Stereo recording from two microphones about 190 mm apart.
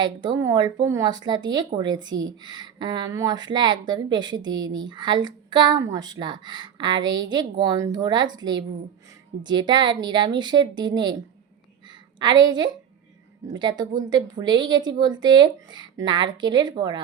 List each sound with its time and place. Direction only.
0.0 s speech: 25° right (ahead or behind)
12.2 s speech: 20° right (ahead or behind)